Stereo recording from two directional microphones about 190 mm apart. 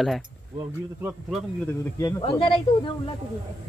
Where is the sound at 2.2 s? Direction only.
25° left (ahead or behind).